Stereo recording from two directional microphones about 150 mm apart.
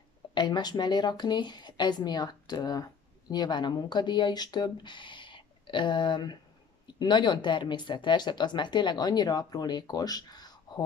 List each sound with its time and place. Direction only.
0.3 s speech: 30° left (ahead or behind)